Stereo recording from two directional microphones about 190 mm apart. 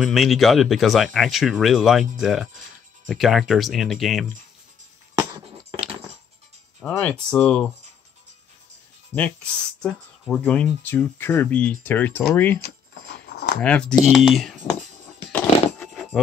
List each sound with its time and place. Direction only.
0.0 s speech: centre (ahead or behind)
5.7 s a sound: 30° right (ahead or behind)
6.8 s speech: 5° left (ahead or behind)
9.1 s speech: 5° left (ahead or behind)
13.6 s speech: 5° left (ahead or behind)
15.3 s coin: centre (ahead or behind)